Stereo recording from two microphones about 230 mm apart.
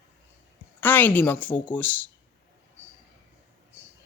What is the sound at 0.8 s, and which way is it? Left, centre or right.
Speech, centre.